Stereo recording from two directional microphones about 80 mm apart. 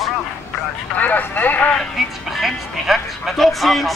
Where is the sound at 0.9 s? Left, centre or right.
Centre.